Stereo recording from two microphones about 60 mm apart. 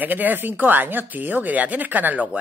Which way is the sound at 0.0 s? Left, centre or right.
Right.